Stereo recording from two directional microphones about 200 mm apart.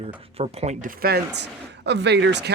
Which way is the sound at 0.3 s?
30° right (ahead or behind).